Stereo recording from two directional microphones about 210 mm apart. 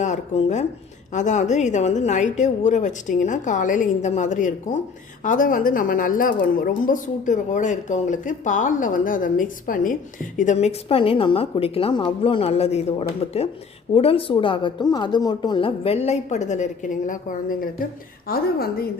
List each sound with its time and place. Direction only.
0.0 s a woman's voice: 35° left (ahead or behind)